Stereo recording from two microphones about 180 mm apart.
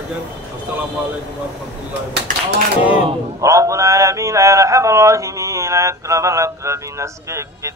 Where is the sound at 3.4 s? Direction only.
15° right (ahead or behind).